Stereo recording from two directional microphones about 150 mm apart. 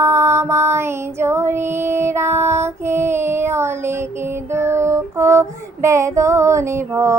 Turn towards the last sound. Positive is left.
turn(degrees=-20)  # may be behind; listen again after turning